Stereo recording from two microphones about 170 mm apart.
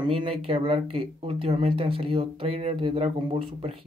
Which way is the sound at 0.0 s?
30° right (ahead or behind).